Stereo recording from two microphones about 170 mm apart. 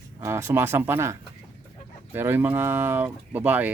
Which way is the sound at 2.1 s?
15° right (ahead or behind).